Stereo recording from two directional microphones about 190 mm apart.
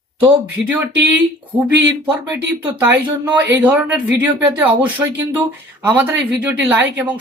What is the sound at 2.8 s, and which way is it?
A woman's voice, 10° right (ahead or behind).